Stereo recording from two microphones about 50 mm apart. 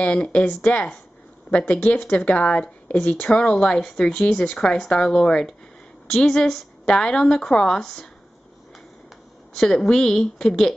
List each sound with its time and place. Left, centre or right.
0.0 s a woman's voice: left
9.5 s a woman's voice: centre